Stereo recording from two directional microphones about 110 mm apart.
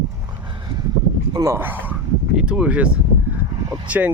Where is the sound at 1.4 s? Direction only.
20° right (ahead or behind).